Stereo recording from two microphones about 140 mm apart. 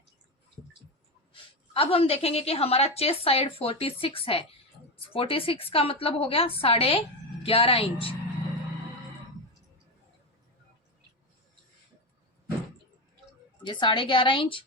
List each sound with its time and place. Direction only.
1.7 s a woman's voice: 45° left (ahead or behind)
13.7 s a woman's voice: 35° left (ahead or behind)